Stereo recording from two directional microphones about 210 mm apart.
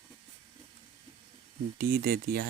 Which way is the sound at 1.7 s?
45° right (ahead or behind).